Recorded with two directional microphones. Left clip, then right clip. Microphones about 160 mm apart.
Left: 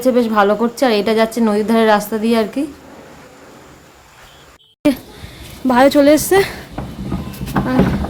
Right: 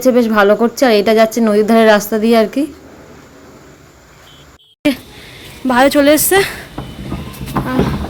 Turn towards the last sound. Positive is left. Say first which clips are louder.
# even
turn(degrees=15)  # may be behind; listen again after turning